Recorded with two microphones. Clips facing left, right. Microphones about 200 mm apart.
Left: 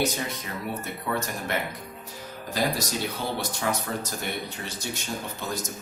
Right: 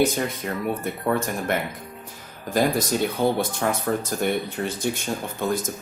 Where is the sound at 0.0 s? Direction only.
55° right (ahead or behind).